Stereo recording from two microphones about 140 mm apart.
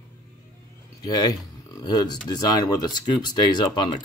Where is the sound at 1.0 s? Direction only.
25° left (ahead or behind).